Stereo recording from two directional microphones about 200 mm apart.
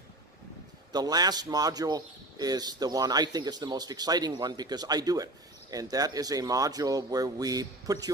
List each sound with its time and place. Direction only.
0.9 s speech: 20° right (ahead or behind)